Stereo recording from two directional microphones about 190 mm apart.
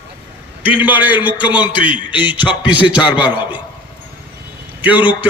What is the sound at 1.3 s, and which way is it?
Speech, 25° left (ahead or behind).